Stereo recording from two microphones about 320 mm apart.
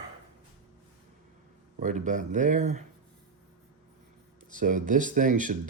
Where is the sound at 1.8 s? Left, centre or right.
Right.